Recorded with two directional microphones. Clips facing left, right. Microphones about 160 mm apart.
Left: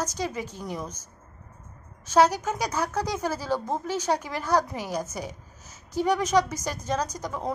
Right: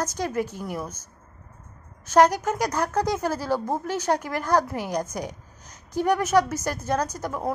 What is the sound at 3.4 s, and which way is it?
A woman's voice, 10° right (ahead or behind).